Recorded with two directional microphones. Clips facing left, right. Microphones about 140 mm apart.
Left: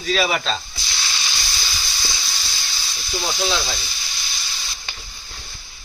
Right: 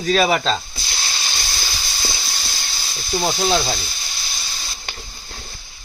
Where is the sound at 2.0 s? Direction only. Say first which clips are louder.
Right 2 dB; 50° right (ahead or behind).